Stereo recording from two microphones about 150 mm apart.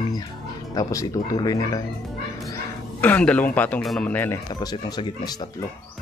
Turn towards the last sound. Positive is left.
turn(degrees=30)  # may be behind; listen again after turning